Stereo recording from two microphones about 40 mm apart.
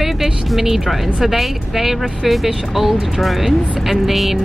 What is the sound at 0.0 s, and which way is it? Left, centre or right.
A woman's voice, centre.